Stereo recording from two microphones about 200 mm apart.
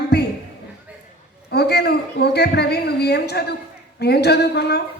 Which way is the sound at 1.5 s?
55° left (ahead or behind).